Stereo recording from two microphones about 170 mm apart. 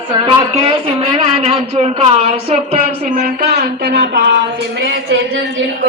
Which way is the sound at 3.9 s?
80° right.